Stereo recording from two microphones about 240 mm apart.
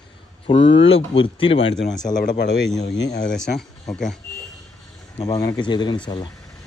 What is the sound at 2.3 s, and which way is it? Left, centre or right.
Speech, left.